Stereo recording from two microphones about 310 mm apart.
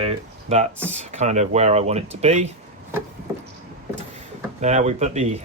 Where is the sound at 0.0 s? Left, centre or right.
Centre.